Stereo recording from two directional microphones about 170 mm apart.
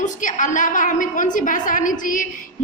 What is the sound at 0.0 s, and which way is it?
A woman's voice, 50° left (ahead or behind).